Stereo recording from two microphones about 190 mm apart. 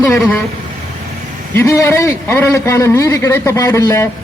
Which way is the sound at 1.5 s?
15° left (ahead or behind).